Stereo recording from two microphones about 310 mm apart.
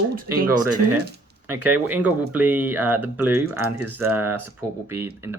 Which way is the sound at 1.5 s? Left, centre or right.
Centre.